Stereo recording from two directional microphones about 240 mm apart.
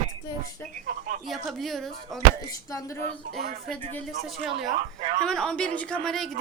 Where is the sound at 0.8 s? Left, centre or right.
Right.